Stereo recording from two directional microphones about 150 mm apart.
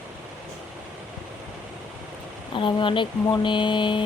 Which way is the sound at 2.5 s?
35° left (ahead or behind).